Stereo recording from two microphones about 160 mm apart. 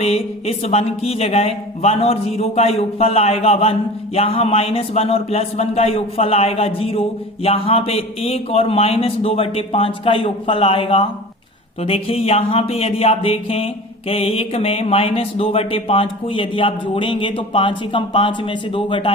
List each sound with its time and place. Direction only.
0.0 s a man's voice: 40° left (ahead or behind)